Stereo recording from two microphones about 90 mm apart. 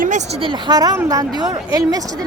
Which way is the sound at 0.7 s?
45° right (ahead or behind).